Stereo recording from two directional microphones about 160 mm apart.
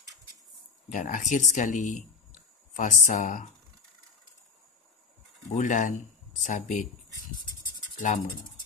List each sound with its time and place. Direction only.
0.8 s speech: 55° left (ahead or behind)
5.5 s speech: 55° left (ahead or behind)
8.0 s speech: 55° left (ahead or behind)